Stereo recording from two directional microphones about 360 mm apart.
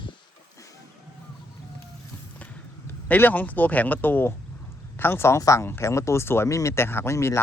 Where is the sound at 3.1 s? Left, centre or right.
Centre.